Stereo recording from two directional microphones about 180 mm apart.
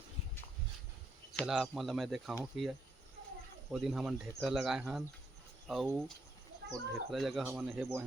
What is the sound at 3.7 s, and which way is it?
Speech, centre (ahead or behind).